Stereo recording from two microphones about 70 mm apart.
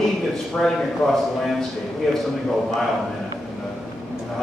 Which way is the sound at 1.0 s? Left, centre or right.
Centre.